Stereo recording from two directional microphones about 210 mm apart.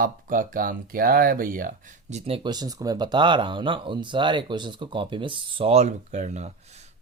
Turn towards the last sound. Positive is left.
turn(degrees=-30)  # may be behind; listen again after turning